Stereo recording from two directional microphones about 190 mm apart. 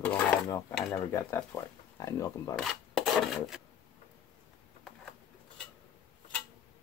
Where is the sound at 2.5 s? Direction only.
Centre (ahead or behind).